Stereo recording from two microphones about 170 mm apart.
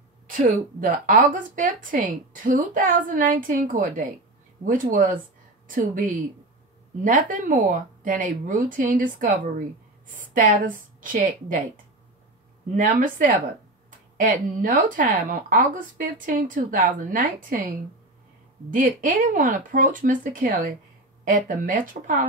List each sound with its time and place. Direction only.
0.3 s a woman's voice: 50° right (ahead or behind)
18.7 s a woman's voice: 50° right (ahead or behind)